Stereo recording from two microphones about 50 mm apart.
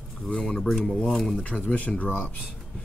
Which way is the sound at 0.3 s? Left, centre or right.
Centre.